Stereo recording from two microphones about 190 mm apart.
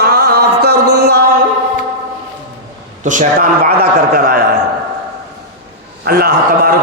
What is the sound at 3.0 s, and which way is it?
Speech, 40° right (ahead or behind).